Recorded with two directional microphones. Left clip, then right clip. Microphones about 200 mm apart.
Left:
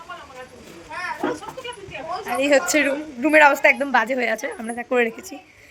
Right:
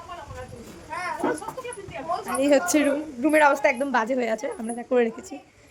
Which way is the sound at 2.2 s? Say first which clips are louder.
Left 3 dB; 15° right (ahead or behind).